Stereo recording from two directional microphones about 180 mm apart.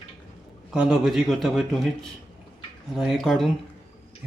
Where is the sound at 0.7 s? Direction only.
5° right (ahead or behind).